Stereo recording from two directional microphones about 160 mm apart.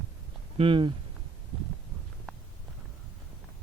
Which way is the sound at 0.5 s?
35° right (ahead or behind).